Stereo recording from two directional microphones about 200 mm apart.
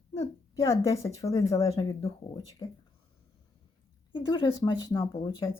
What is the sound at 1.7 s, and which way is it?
Speech, 30° left (ahead or behind).